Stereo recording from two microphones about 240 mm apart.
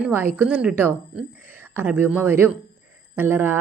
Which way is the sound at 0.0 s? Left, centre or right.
Centre.